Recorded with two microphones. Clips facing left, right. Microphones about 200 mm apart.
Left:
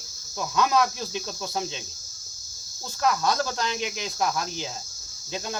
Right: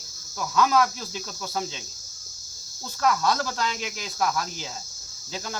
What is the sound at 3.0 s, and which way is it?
Speech, 20° left (ahead or behind).